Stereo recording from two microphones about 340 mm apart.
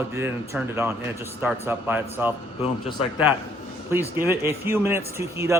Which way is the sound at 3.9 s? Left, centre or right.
Centre.